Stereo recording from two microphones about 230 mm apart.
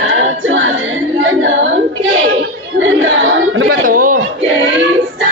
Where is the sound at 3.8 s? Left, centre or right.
Right.